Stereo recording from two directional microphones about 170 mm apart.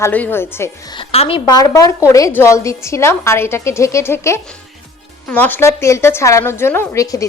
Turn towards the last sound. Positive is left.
turn(degrees=20)  # may be behind; listen again after turning